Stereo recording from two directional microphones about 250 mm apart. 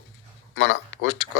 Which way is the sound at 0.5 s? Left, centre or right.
Left.